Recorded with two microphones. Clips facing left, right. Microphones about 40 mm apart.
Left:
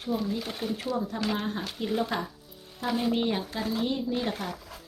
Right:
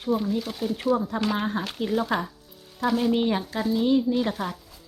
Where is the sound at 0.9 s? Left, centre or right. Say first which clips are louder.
Right 4 dB; right.